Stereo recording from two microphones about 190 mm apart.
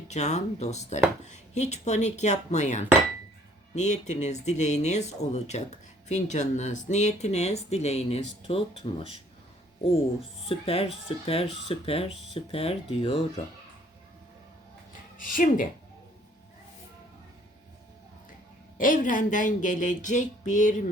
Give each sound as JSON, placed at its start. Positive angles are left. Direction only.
{"t": 0.1, "sound": "speech", "side_deg": 35}
{"t": 10.5, "sound": "speech", "side_deg": 30}
{"t": 15.2, "sound": "speech", "side_deg": 45}
{"t": 18.8, "sound": "speech", "side_deg": 45}